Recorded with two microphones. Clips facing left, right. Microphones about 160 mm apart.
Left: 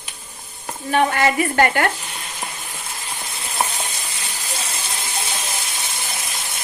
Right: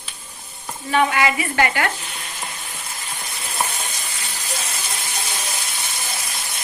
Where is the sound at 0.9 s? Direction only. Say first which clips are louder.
Left 1 dB; 40° left (ahead or behind).